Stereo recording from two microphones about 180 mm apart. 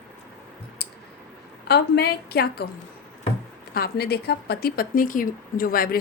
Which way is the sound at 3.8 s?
60° left (ahead or behind).